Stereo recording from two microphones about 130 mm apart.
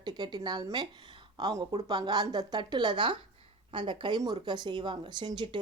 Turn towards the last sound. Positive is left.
turn(degrees=-35)  # may be behind; listen again after turning